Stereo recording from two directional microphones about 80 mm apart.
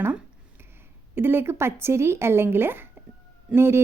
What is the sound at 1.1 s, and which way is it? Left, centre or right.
A woman's voice, right.